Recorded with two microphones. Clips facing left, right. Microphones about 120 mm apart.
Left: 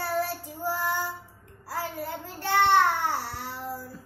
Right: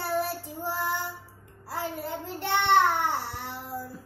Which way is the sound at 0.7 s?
20° right (ahead or behind).